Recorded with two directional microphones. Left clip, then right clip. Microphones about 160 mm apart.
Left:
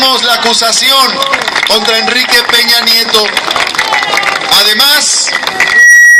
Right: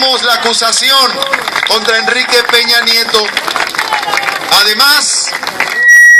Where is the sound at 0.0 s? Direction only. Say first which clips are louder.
Left 2 dB; 10° left (ahead or behind).